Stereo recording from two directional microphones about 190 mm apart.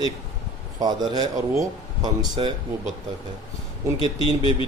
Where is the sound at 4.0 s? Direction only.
30° left (ahead or behind).